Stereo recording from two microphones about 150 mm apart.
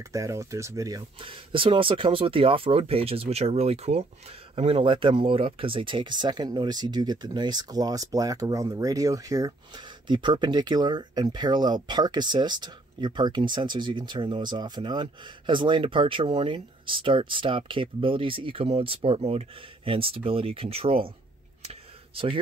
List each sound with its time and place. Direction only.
0.1 s speech: 20° right (ahead or behind)
1.2 s speech: 35° right (ahead or behind)
22.1 s speech: 35° right (ahead or behind)